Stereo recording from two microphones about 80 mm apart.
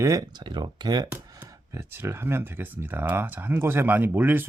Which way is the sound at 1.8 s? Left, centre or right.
Right.